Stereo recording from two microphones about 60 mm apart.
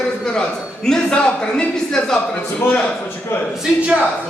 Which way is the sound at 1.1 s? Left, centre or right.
Centre.